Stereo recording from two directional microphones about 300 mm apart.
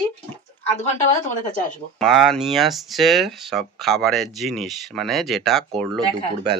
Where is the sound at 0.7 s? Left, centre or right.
Left.